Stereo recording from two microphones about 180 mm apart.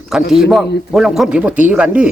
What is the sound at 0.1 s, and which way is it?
A man's voice, 5° right (ahead or behind).